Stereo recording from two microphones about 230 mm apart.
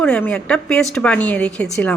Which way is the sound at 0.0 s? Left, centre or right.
Centre.